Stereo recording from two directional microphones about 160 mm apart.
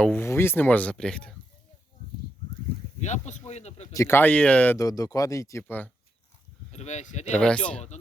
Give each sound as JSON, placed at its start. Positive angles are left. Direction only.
{"t": 0.0, "sound": "speech", "side_deg": 10}
{"t": 3.0, "sound": "speech", "side_deg": 45}
{"t": 3.9, "sound": "speech", "side_deg": 15}
{"t": 4.9, "sound": "speech", "side_deg": 20}
{"t": 6.7, "sound": "speech", "side_deg": 45}
{"t": 7.3, "sound": "speech", "side_deg": 5}